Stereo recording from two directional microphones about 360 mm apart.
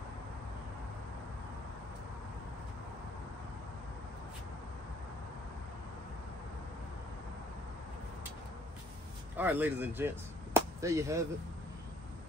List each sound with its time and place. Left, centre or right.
9.4 s speech: centre